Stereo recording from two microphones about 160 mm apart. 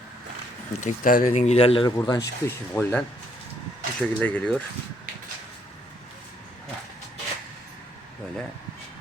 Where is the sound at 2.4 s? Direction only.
15° left (ahead or behind).